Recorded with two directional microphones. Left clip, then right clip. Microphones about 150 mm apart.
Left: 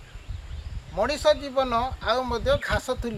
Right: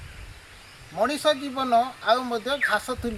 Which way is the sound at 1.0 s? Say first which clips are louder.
Left 1 dB; 40° left (ahead or behind).